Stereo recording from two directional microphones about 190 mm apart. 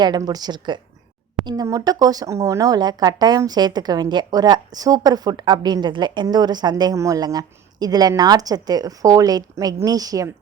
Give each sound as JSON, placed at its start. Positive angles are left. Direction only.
{"t": 0.0, "sound": "speech", "side_deg": -20}